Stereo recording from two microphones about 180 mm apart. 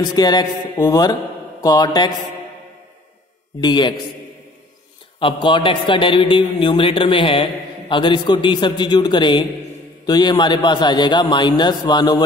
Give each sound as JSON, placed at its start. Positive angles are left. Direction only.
{"t": 0.0, "sound": "a man's voice", "side_deg": 20}
{"t": 1.6, "sound": "mantra", "side_deg": 20}
{"t": 3.6, "sound": "a man's voice", "side_deg": 25}
{"t": 5.2, "sound": "a man's voice", "side_deg": 25}